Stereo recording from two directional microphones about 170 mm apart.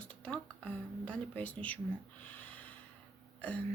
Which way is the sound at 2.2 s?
10° left (ahead or behind).